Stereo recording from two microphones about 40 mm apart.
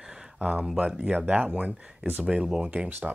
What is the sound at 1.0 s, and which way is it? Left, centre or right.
Speech, right.